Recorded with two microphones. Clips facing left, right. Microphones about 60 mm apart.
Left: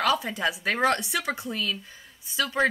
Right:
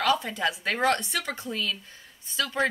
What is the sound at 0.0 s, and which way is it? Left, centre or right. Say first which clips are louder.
A woman's voice: even; centre.